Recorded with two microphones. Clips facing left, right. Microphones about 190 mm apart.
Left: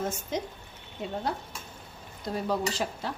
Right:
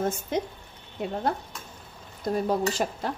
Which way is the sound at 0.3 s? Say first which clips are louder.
Right 4 dB; 55° right (ahead or behind).